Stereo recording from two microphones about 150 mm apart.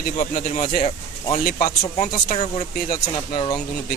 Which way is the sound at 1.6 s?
65° left (ahead or behind).